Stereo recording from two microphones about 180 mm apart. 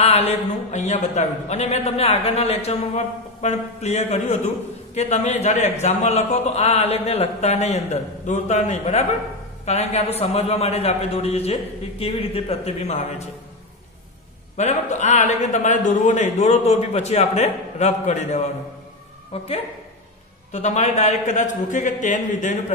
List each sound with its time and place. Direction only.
0.0 s a man's voice: 35° left (ahead or behind)
14.6 s a man's voice: 40° left (ahead or behind)
20.5 s a man's voice: 40° left (ahead or behind)